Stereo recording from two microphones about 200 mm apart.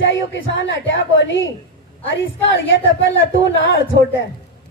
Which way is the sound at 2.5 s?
65° left (ahead or behind).